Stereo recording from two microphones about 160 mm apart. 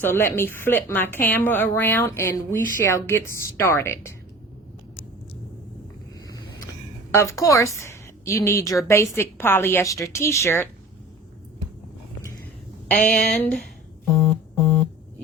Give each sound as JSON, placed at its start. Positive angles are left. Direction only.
{"t": 0.0, "sound": "a woman's voice", "side_deg": 15}
{"t": 7.1, "sound": "a woman's voice", "side_deg": 20}
{"t": 13.1, "sound": "speech", "side_deg": 5}
{"t": 14.2, "sound": "a sound", "side_deg": 10}